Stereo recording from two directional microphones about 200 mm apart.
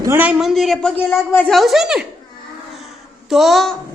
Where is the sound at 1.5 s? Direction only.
Centre (ahead or behind).